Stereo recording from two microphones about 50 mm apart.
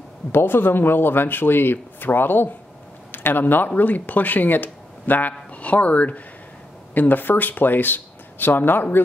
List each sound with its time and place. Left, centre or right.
0.3 s speech: left